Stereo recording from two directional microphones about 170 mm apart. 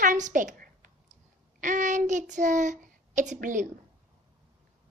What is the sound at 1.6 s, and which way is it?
A child's voice, 50° right (ahead or behind).